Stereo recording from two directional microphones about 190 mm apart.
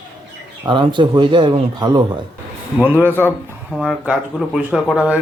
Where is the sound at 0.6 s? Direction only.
25° right (ahead or behind).